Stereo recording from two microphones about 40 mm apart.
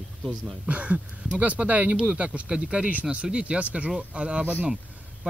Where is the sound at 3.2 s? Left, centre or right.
Right.